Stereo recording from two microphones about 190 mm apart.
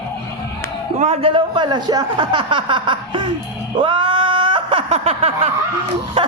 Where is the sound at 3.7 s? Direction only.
25° right (ahead or behind).